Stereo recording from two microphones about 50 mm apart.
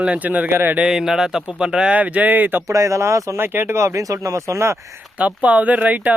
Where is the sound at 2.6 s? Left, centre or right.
Right.